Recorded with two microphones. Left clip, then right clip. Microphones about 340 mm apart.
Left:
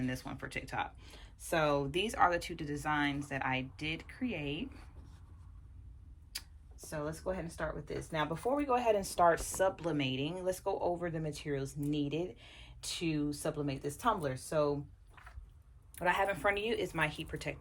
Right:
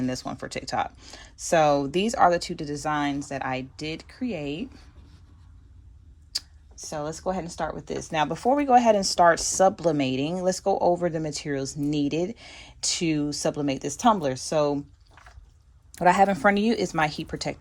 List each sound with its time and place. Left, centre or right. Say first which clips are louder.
0.0 s speech: right 10 dB; centre
6.3 s a sound: right 14 dB; centre
7.9 s speech: right 12 dB; right
15.9 s speech: right 12 dB; centre